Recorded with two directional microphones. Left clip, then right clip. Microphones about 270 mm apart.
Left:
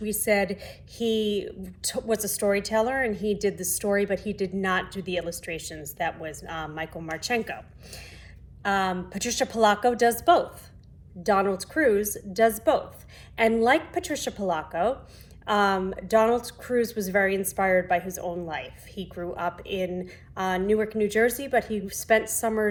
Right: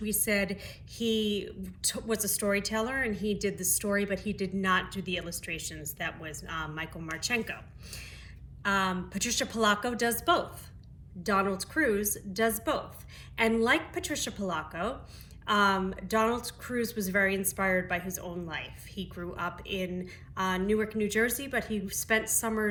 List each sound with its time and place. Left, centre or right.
0.0 s speech: centre
2.1 s speech: left
2.4 s speech: centre
3.5 s speech: left
3.8 s speech: centre
9.7 s speech: left
11.2 s speech: centre